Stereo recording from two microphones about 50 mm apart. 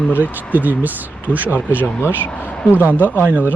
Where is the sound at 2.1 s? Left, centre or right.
Left.